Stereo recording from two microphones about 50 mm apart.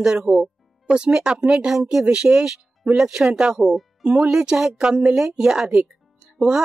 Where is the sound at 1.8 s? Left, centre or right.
Centre.